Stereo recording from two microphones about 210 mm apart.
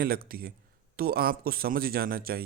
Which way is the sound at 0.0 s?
45° right (ahead or behind).